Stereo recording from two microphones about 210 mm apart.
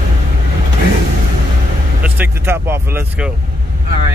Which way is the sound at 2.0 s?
10° right (ahead or behind).